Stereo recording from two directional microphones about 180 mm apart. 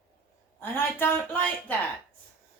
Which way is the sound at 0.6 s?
10° left (ahead or behind).